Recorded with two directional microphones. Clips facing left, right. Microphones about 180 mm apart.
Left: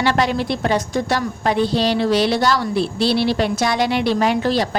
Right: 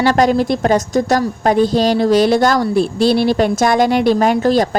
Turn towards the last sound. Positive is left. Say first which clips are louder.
# right 5 dB
turn(degrees=-45)  # may be behind; listen again after turning